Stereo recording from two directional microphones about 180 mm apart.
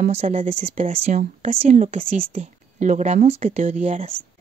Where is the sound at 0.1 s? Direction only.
40° right (ahead or behind).